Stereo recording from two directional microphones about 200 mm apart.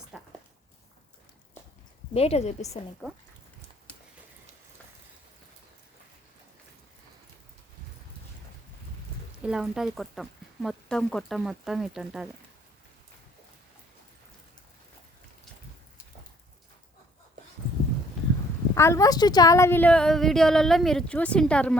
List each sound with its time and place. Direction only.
0.1 s a sound: 5° right (ahead or behind)
2.1 s a woman's voice: 30° left (ahead or behind)
9.4 s a woman's voice: 5° right (ahead or behind)
18.7 s a woman's voice: 15° left (ahead or behind)